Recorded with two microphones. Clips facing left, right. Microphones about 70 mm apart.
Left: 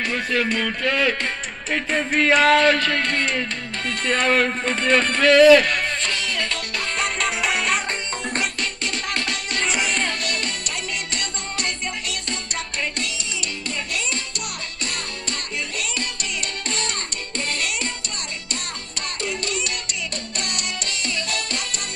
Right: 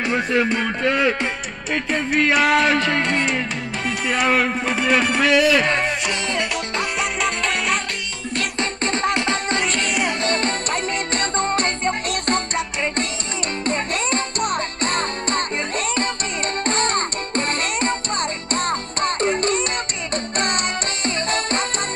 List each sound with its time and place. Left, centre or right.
0.0 s speech: right
1.7 s music: centre
7.0 s music: centre
8.5 s music: right
9.7 s music: centre
10.2 s music: right
13.7 s music: right
16.6 s music: right